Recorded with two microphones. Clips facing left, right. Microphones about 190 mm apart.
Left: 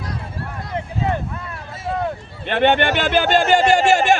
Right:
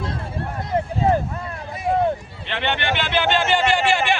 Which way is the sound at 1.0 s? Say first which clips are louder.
Right 4 dB; 35° right (ahead or behind).